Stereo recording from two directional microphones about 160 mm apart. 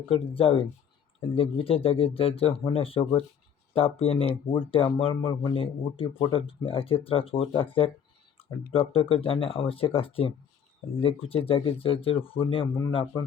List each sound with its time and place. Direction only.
0.1 s speech: 35° left (ahead or behind)